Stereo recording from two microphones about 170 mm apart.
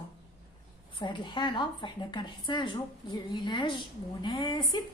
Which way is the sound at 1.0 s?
25° left (ahead or behind).